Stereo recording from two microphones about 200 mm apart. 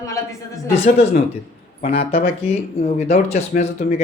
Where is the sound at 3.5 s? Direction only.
45° left (ahead or behind).